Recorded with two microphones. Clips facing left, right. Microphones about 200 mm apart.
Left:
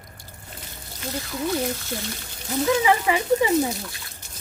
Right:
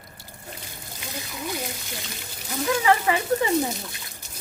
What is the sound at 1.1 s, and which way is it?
Speech, 15° right (ahead or behind).